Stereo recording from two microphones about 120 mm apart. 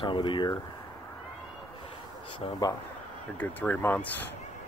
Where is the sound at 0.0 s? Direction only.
40° left (ahead or behind).